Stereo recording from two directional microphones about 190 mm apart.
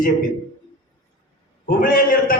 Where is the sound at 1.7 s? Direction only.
50° left (ahead or behind).